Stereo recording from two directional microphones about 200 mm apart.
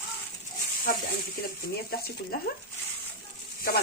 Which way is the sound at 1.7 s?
50° left (ahead or behind).